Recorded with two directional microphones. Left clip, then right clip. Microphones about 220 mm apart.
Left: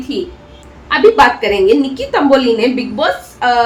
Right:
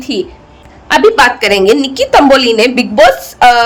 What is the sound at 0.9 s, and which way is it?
A woman's voice, 55° right (ahead or behind).